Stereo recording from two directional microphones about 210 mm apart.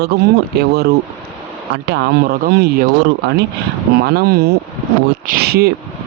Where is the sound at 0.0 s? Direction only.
50° right (ahead or behind).